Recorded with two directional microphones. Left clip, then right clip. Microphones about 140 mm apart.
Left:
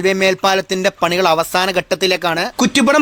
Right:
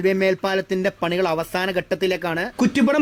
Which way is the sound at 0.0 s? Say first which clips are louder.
Left 6 dB; 15° left (ahead or behind).